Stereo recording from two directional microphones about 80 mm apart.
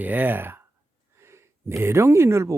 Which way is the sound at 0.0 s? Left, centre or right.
Right.